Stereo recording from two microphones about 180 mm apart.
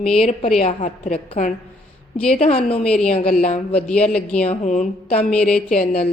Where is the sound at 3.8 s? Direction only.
5° left (ahead or behind).